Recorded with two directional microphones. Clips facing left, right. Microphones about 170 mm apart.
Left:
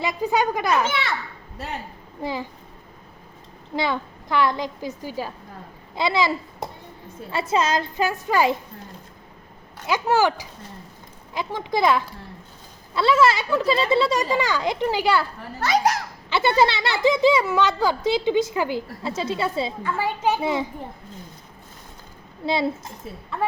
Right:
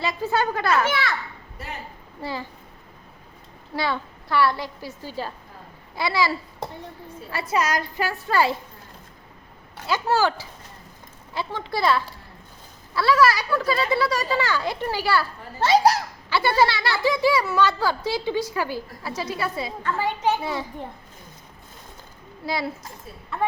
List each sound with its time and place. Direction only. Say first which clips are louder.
0.0 s a child's voice: left 2 dB; 15° left (ahead or behind)
2.2 s a child's voice: left 3 dB; 15° left (ahead or behind)
3.8 s a child's voice: left 2 dB; 20° left (ahead or behind)
9.8 s a child's voice: left 2 dB; 15° left (ahead or behind)
15.6 s a child's voice: right 3 dB; 30° right (ahead or behind)
16.3 s a child's voice: left 1 dB; 20° left (ahead or behind)
19.8 s a child's voice: right 2 dB; 5° left (ahead or behind)
20.4 s a child's voice: left 5 dB; 20° left (ahead or behind)
22.4 s a child's voice: left 5 dB; 25° left (ahead or behind)